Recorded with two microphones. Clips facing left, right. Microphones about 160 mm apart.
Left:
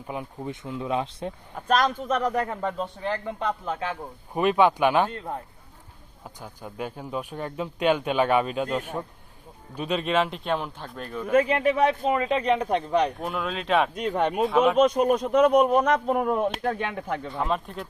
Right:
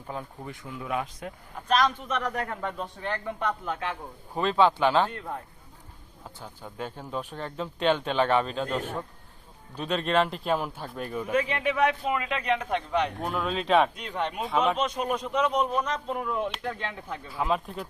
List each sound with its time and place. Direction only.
0.1 s speech: 15° left (ahead or behind)
1.6 s speech: 45° left (ahead or behind)
3.4 s a man's voice: 30° left (ahead or behind)
4.4 s speech: 15° left (ahead or behind)
6.2 s speech: 15° left (ahead or behind); by 11.2 s 10° right (ahead or behind)
11.3 s a man's voice: 45° left (ahead or behind)
13.2 s speech: centre (ahead or behind)
13.9 s speech: 45° left (ahead or behind)
14.4 s speech: centre (ahead or behind)
14.8 s speech: 45° left (ahead or behind); by 17.2 s 60° left (ahead or behind)
17.2 s speech: 5° right (ahead or behind)